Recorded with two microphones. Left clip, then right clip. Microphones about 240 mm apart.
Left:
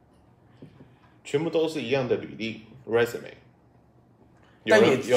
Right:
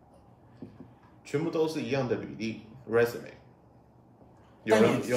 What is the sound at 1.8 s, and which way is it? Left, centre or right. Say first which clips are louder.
Speech: left 5 dB; left.